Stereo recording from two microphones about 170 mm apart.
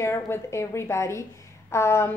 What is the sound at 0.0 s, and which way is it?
A woman's voice, 15° left (ahead or behind).